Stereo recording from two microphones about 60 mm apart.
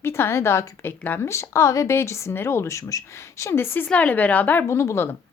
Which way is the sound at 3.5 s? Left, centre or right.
Left.